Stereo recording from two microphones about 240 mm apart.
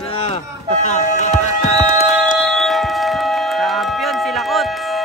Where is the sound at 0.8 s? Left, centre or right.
Left.